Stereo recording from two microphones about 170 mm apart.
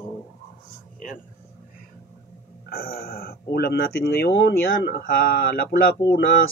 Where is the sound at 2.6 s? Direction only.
65° left (ahead or behind).